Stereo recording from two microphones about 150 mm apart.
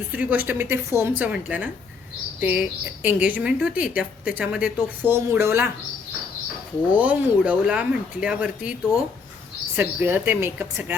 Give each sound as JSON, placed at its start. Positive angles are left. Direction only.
{"t": 0.1, "sound": "speech", "side_deg": -10}
{"t": 6.9, "sound": "speech", "side_deg": -10}
{"t": 9.7, "sound": "speech", "side_deg": -15}